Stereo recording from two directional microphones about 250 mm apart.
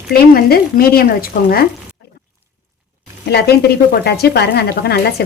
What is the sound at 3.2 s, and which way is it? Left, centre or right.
Speech, left.